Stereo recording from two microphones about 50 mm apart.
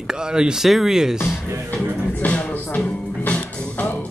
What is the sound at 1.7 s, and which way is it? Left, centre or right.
Music, left.